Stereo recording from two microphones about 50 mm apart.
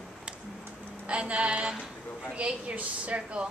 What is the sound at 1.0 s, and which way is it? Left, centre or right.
A woman's voice, right.